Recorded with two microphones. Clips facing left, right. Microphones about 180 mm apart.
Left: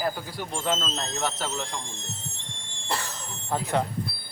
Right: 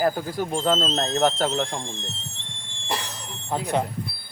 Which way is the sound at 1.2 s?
50° right (ahead or behind).